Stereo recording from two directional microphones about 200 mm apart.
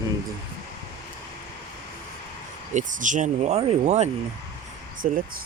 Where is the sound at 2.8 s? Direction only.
40° right (ahead or behind).